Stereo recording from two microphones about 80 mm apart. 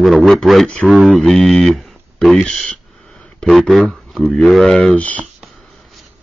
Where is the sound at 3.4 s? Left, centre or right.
Centre.